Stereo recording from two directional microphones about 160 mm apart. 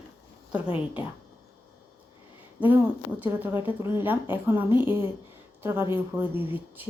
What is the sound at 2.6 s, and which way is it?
A woman's voice, 10° right (ahead or behind).